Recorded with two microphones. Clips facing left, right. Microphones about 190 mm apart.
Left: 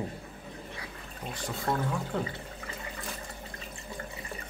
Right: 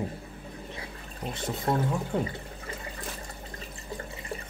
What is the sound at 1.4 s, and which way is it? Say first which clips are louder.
Speech: right 3 dB; 20° right (ahead or behind).